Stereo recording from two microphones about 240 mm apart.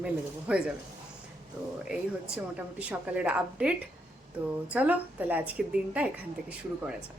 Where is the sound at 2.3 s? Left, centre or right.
Centre.